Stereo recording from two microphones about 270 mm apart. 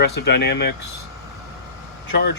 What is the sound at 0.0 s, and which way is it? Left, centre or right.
Speech, left.